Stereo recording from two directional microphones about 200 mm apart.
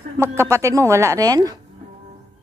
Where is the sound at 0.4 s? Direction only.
15° right (ahead or behind).